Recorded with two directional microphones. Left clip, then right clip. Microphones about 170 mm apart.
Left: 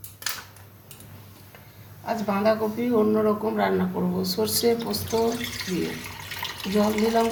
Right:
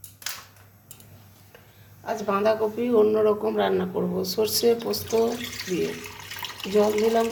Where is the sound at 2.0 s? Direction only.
45° right (ahead or behind).